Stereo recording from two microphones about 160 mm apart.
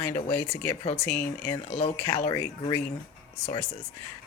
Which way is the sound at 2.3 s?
25° left (ahead or behind).